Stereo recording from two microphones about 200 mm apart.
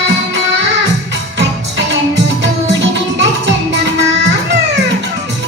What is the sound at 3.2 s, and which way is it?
Music, 60° right (ahead or behind).